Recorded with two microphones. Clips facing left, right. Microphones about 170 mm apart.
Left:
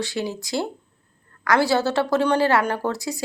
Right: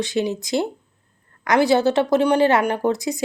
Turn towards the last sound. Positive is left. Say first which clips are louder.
# right 5 dB
turn(degrees=-20)  # may be behind; listen again after turning